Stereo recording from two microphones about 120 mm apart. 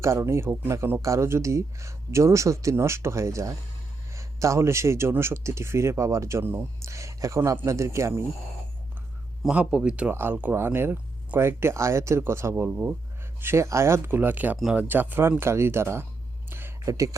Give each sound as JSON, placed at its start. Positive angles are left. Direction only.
{"t": 0.0, "sound": "a man's voice", "side_deg": -25}
{"t": 9.4, "sound": "a man's voice", "side_deg": -10}
{"t": 16.5, "sound": "a sound", "side_deg": -20}
{"t": 16.9, "sound": "a man's voice", "side_deg": -30}